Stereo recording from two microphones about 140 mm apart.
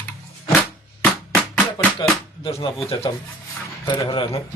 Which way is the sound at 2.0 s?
35° left (ahead or behind).